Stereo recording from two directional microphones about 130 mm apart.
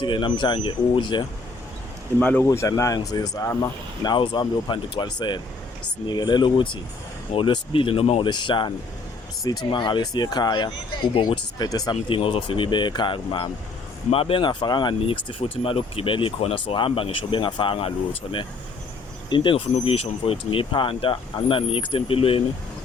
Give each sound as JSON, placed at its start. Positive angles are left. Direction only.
{"t": 0.0, "sound": "speech", "side_deg": 40}
{"t": 2.1, "sound": "speech", "side_deg": 15}
{"t": 2.5, "sound": "speech", "side_deg": 25}
{"t": 8.3, "sound": "speech", "side_deg": 35}